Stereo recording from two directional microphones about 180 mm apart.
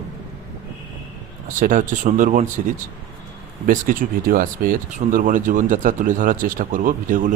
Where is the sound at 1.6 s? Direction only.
45° right (ahead or behind).